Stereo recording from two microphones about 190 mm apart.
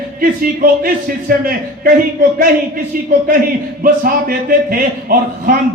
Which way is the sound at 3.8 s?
45° right (ahead or behind).